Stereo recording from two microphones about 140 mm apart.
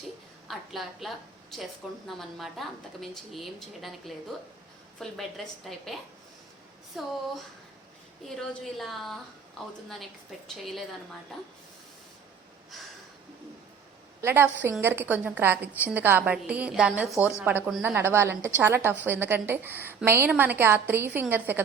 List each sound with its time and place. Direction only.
0.4 s a woman's voice: centre (ahead or behind)
8.4 s a woman's voice: centre (ahead or behind)
10.6 s a woman's voice: centre (ahead or behind)
14.2 s a woman's voice: 15° right (ahead or behind)